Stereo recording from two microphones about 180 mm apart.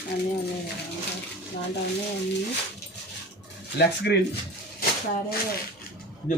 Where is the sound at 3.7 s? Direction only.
65° left (ahead or behind).